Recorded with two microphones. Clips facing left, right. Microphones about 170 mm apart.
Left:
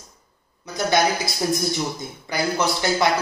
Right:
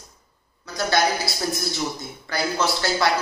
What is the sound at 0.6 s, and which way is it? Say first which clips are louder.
Speech: left 2 dB; 20° left (ahead or behind).